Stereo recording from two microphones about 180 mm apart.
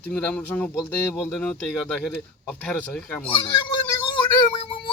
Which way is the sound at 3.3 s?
30° left (ahead or behind).